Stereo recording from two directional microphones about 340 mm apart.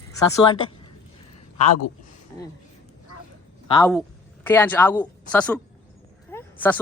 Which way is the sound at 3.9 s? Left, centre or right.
Centre.